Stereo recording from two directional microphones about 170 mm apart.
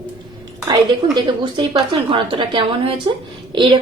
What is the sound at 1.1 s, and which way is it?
A woman's voice, 25° right (ahead or behind).